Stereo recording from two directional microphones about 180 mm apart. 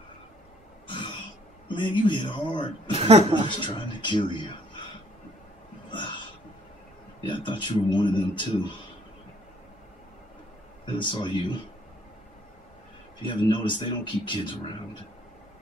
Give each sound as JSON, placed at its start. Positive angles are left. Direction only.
{"t": 0.8, "sound": "throat clearing", "side_deg": 25}
{"t": 1.7, "sound": "a man's voice", "side_deg": 25}
{"t": 2.9, "sound": "a woman's voice", "side_deg": -35}
{"t": 3.4, "sound": "a man's voice", "side_deg": 25}
{"t": 5.9, "sound": "a sound", "side_deg": 25}
{"t": 7.2, "sound": "a man's voice", "side_deg": 25}
{"t": 10.9, "sound": "a man's voice", "side_deg": 25}
{"t": 13.2, "sound": "a man's voice", "side_deg": 25}